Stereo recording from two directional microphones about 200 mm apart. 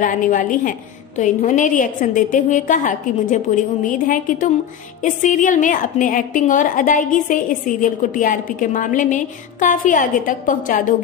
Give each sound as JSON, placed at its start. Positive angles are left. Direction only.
{"t": 0.0, "sound": "a woman's voice", "side_deg": 40}